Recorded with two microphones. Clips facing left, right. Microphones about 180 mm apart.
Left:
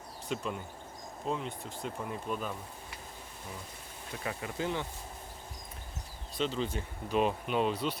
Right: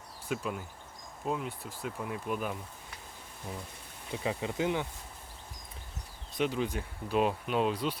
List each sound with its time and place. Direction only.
0.3 s speech: 5° right (ahead or behind)
4.1 s speech: 20° right (ahead or behind)
6.3 s speech: 10° right (ahead or behind)